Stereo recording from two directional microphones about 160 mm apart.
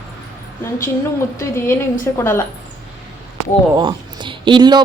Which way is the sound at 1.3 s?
15° left (ahead or behind).